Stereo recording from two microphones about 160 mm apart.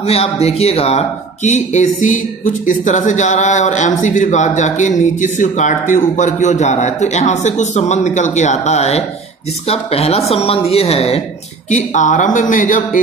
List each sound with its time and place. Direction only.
0.0 s speech: 40° left (ahead or behind)
11.7 s speech: 50° left (ahead or behind)